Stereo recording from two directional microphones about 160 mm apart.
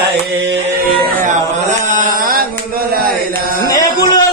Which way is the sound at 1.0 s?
60° right (ahead or behind).